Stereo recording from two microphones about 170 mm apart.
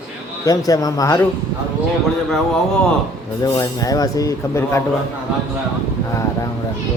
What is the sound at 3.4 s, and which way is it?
Speech, 20° left (ahead or behind).